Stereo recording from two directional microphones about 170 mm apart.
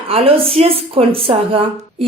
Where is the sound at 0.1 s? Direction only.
35° right (ahead or behind).